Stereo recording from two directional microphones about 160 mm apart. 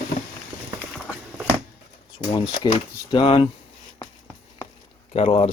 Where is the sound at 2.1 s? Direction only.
25° left (ahead or behind).